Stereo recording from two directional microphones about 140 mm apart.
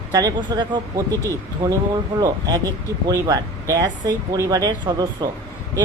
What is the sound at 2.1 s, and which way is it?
Speech, 25° right (ahead or behind).